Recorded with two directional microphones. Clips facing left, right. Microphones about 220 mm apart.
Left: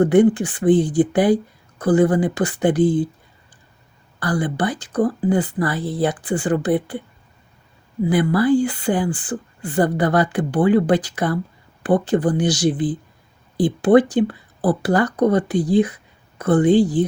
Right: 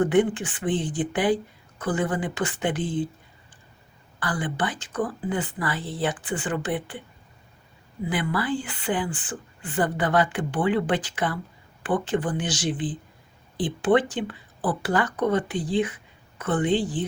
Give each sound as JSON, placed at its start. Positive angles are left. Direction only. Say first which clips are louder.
{"t": 0.0, "sound": "speech", "louder": "left 7 dB", "side_deg": 40}
{"t": 4.2, "sound": "speech", "louder": "left 7 dB", "side_deg": 40}
{"t": 8.1, "sound": "speech", "louder": "left 10 dB", "side_deg": 40}